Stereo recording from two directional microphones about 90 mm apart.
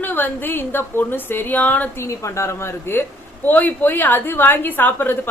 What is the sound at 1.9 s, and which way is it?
A woman's voice, 35° left (ahead or behind).